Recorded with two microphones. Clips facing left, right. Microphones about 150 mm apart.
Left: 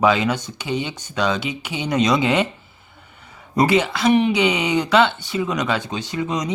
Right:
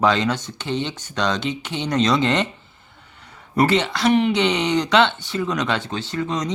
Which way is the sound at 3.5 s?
10° left (ahead or behind).